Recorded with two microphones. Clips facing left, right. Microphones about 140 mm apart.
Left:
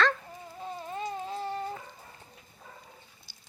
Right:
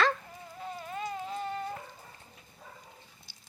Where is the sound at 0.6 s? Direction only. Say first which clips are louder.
Left 2 dB; 25° left (ahead or behind).